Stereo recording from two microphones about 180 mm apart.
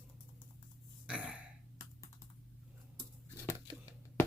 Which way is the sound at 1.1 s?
5° right (ahead or behind).